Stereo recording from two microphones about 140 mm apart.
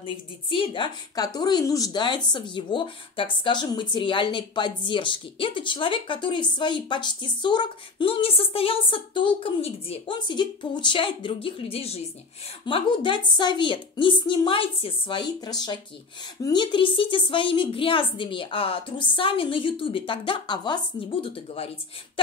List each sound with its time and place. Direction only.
0.0 s a woman's voice: 40° left (ahead or behind)